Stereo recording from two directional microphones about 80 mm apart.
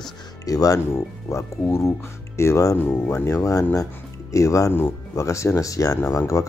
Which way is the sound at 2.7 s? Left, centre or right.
Left.